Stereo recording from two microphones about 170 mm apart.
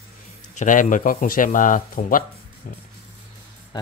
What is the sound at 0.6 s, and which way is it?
Speech, 50° left (ahead or behind).